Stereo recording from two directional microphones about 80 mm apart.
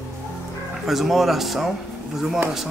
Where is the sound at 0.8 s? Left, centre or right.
Centre.